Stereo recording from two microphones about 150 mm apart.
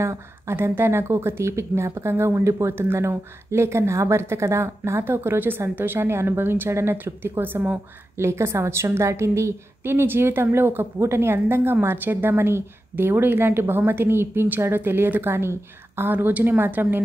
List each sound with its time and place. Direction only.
0.0 s speech: 20° right (ahead or behind)